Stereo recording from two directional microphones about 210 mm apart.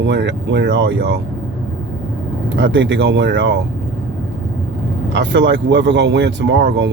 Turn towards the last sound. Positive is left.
turn(degrees=-55)  # may be behind; listen again after turning